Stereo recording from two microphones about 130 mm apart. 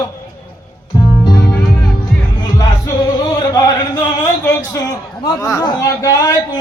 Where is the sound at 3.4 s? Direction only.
30° left (ahead or behind).